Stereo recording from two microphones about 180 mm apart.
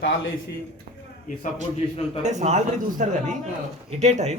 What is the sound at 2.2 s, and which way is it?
Speech, 40° right (ahead or behind).